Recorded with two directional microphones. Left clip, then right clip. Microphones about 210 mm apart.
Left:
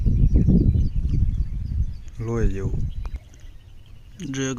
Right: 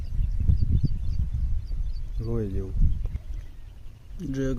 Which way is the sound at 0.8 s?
40° right (ahead or behind).